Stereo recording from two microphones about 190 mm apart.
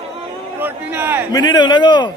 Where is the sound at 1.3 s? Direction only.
20° left (ahead or behind).